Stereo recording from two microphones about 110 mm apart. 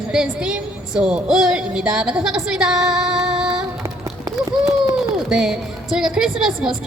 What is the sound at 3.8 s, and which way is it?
Run, 30° right (ahead or behind).